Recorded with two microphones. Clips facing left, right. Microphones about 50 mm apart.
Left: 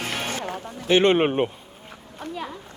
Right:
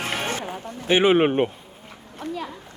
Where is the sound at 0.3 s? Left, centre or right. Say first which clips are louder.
Right 1 dB; centre.